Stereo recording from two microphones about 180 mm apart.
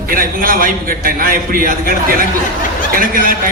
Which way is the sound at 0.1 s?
50° right (ahead or behind).